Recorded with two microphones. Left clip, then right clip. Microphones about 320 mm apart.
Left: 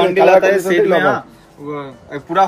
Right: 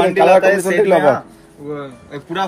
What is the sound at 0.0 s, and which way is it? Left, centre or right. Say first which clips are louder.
Speech: even; centre.